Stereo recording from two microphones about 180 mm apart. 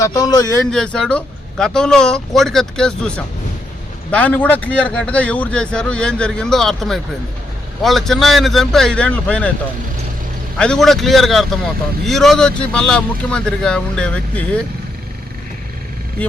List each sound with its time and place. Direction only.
0.0 s speech: 20° left (ahead or behind)
0.7 s a man's voice: 5° left (ahead or behind)
10.6 s a man's voice: 5° left (ahead or behind)